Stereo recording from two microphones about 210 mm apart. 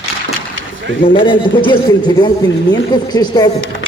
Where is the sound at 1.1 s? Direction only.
25° left (ahead or behind).